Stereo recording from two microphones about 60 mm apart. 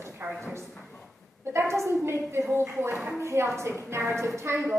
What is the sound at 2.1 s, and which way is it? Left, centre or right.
A woman's voice, right.